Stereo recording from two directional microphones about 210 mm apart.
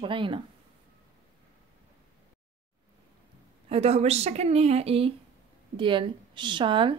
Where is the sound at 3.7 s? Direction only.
30° right (ahead or behind).